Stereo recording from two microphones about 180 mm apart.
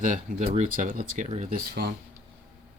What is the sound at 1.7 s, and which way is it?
Speech, 60° right (ahead or behind).